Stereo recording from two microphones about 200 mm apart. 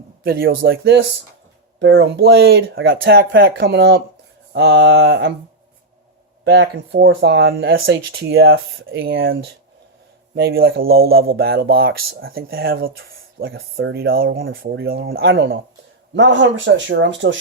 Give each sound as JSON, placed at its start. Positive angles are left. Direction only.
{"t": 0.2, "sound": "speech", "side_deg": -50}
{"t": 1.8, "sound": "speech", "side_deg": -65}
{"t": 6.4, "sound": "speech", "side_deg": -60}
{"t": 9.1, "sound": "speech", "side_deg": -75}
{"t": 10.3, "sound": "speech", "side_deg": -55}